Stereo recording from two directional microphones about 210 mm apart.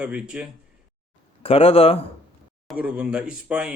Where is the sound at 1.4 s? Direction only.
25° left (ahead or behind).